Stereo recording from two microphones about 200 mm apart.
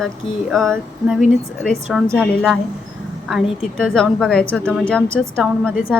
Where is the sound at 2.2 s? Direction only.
Centre (ahead or behind).